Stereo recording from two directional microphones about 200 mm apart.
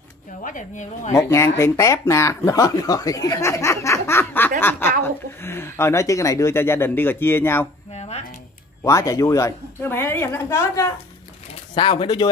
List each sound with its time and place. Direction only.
0.4 s speech: 40° left (ahead or behind)
1.1 s speech: 15° left (ahead or behind)
7.9 s a sound: 35° left (ahead or behind)
8.8 s speech: 15° left (ahead or behind)
11.7 s speech: 25° left (ahead or behind)